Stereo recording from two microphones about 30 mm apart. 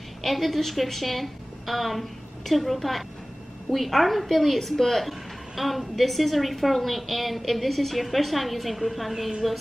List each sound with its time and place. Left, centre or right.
0.2 s a woman's voice: centre